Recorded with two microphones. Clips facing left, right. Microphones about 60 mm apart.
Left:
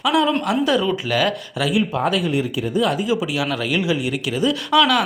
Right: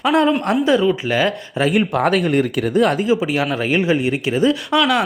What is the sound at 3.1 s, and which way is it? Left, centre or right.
Speech, right.